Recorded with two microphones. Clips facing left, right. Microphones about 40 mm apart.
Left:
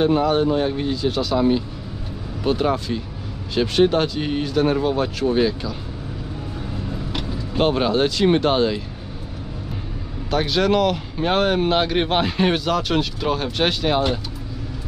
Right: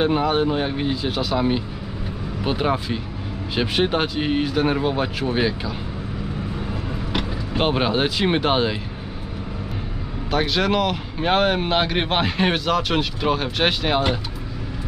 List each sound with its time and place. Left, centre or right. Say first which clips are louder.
0.0 s speech: left 2 dB; centre
7.1 s speech: right 2 dB; centre
10.3 s speech: left 2 dB; centre